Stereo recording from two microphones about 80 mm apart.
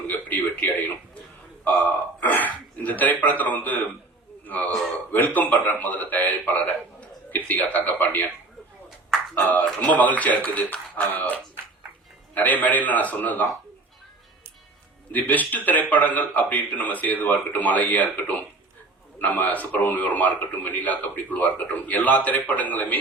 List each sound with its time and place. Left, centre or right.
0.1 s a sound: left
2.2 s a sound: left
4.4 s a man's voice: centre
9.3 s a man's voice: left
12.4 s a man's voice: left
15.1 s a man's voice: left